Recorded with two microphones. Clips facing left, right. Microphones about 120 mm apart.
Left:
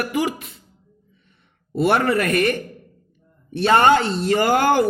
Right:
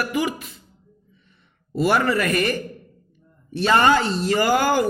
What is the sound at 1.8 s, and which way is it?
Speech, 60° left (ahead or behind).